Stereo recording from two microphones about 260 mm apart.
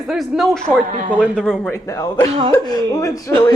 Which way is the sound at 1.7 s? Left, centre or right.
Centre.